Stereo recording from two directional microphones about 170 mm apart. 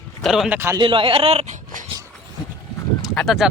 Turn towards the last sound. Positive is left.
turn(degrees=0)  # may be behind; listen again after turning